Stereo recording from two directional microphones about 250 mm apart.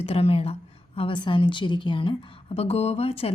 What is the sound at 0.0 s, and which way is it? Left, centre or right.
A woman's voice, left.